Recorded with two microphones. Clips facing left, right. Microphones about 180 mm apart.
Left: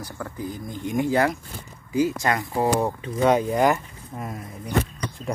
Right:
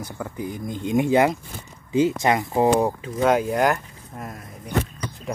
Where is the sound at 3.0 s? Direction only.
Centre (ahead or behind).